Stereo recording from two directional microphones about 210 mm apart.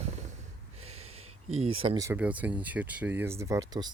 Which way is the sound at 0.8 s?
30° right (ahead or behind).